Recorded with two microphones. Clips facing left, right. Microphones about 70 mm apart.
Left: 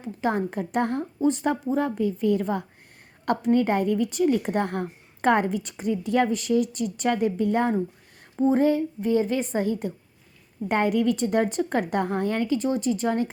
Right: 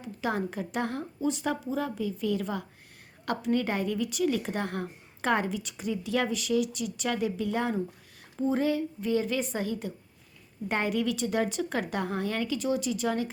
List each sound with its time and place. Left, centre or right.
0.0 s a woman's voice: left
8.4 s a woman's voice: left